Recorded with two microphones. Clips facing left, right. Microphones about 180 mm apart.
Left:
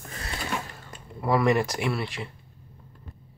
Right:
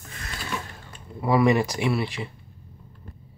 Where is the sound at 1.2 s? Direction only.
Centre (ahead or behind).